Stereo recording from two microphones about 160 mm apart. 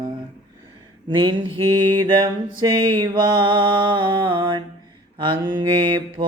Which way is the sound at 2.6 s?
25° right (ahead or behind).